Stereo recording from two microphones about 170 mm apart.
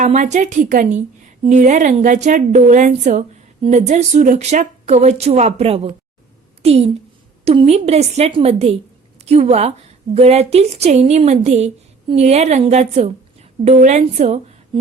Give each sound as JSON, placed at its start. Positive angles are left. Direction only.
{"t": 0.0, "sound": "a woman's voice", "side_deg": -45}